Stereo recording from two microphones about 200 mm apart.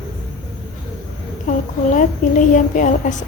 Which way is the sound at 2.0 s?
40° left (ahead or behind).